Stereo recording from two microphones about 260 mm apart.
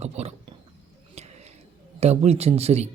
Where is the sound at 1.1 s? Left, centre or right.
Right.